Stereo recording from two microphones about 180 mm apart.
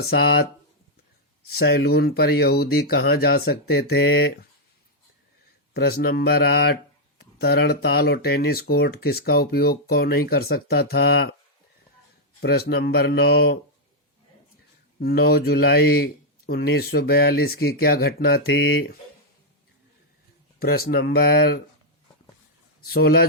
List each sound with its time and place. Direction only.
0.1 s speech: 65° left (ahead or behind)
1.5 s speech: 65° left (ahead or behind)
5.7 s speech: 60° left (ahead or behind)
12.4 s speech: 60° left (ahead or behind)
14.9 s speech: 60° left (ahead or behind)
20.6 s speech: 55° left (ahead or behind)
22.8 s speech: 60° left (ahead or behind)